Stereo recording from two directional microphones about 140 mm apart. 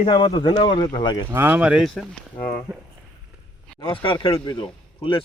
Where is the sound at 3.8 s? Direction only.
40° left (ahead or behind).